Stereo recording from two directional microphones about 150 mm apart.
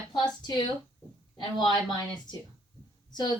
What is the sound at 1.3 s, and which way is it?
Speech, 30° left (ahead or behind).